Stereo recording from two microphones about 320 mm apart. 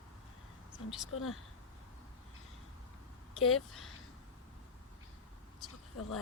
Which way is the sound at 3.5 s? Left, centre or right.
Centre.